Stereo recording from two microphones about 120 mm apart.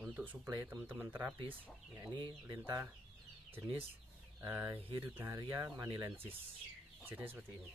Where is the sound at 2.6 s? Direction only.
20° right (ahead or behind).